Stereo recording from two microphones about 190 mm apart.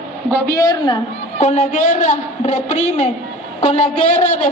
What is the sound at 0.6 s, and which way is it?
Speech, 20° left (ahead or behind).